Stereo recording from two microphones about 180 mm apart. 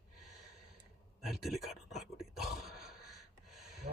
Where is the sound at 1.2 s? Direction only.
Centre (ahead or behind).